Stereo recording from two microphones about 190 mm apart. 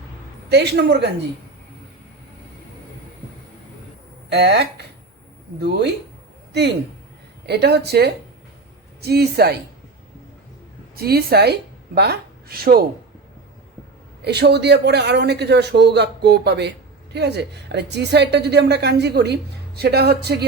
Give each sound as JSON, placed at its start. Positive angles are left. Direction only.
{"t": 0.5, "sound": "a man's voice", "side_deg": -60}
{"t": 4.3, "sound": "a man's voice", "side_deg": -60}
{"t": 10.9, "sound": "a woman's voice", "side_deg": -55}
{"t": 14.3, "sound": "a man's voice", "side_deg": -60}